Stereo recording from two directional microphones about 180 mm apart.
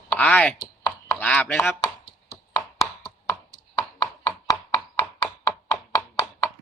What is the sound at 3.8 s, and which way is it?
Chopping, 20° left (ahead or behind).